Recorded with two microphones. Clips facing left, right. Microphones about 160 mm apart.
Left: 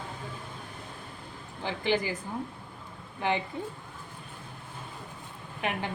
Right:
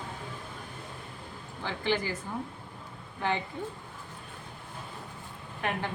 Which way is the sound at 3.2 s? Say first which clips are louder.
Left 2 dB; 15° left (ahead or behind).